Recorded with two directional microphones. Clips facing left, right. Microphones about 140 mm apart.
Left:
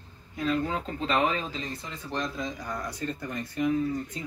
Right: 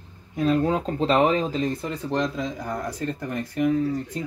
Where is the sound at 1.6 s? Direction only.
55° right (ahead or behind); by 2.8 s 75° right (ahead or behind).